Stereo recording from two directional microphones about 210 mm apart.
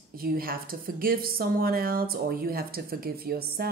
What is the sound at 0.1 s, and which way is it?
A woman's voice, 45° right (ahead or behind).